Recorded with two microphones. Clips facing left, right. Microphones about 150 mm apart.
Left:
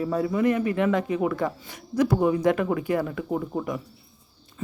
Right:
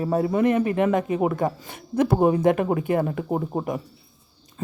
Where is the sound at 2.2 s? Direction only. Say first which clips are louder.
Right 3 dB; 40° right (ahead or behind).